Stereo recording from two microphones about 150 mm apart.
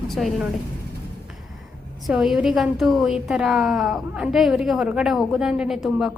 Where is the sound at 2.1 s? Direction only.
5° right (ahead or behind).